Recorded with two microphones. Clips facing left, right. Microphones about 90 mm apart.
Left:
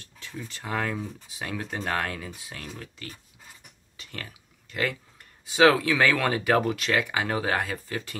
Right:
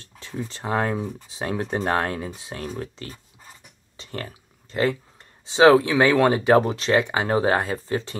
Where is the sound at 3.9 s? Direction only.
35° right (ahead or behind).